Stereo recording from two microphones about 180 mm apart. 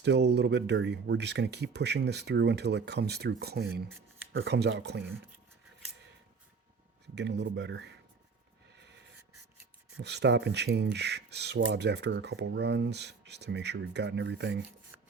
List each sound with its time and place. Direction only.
0.0 s speech: 70° right (ahead or behind)
7.2 s speech: 75° right (ahead or behind)
10.0 s speech: 70° right (ahead or behind)